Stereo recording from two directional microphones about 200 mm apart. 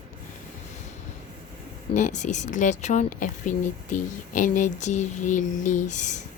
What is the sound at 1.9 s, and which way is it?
Speech, 35° left (ahead or behind).